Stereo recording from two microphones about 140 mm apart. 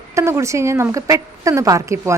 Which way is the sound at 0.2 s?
20° right (ahead or behind).